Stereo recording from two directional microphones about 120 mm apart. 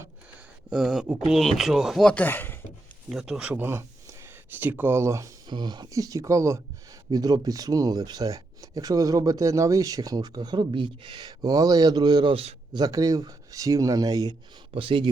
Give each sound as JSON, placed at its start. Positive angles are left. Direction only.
{"t": 0.7, "sound": "speech", "side_deg": -5}
{"t": 2.0, "sound": "speech", "side_deg": 15}
{"t": 3.1, "sound": "speech", "side_deg": -5}
{"t": 3.5, "sound": "speech", "side_deg": -20}
{"t": 5.5, "sound": "speech", "side_deg": -40}
{"t": 12.7, "sound": "speech", "side_deg": -30}
{"t": 14.7, "sound": "speech", "side_deg": -45}